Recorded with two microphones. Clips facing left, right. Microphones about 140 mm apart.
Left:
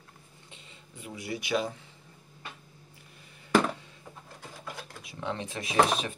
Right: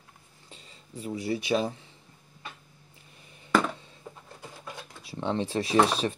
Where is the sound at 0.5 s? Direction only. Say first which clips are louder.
Right 5 dB; 35° right (ahead or behind).